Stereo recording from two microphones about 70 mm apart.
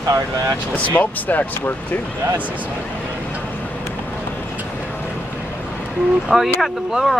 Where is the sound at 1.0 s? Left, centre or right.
Left.